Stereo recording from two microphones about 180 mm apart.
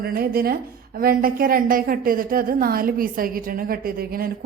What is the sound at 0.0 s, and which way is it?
A woman's voice, 55° right (ahead or behind).